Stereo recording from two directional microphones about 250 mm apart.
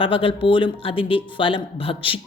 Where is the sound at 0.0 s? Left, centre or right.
Left.